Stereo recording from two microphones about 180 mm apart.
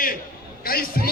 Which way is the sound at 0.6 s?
55° left (ahead or behind).